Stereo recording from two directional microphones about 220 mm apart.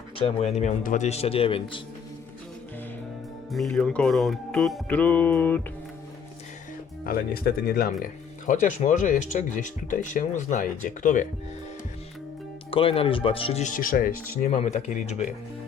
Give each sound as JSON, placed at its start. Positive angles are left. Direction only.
{"t": 0.2, "sound": "speech", "side_deg": 25}
{"t": 3.5, "sound": "speech", "side_deg": 0}
{"t": 7.0, "sound": "speech", "side_deg": 40}
{"t": 12.7, "sound": "speech", "side_deg": 25}